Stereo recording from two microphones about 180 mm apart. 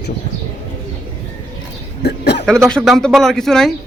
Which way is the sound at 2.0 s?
65° left (ahead or behind).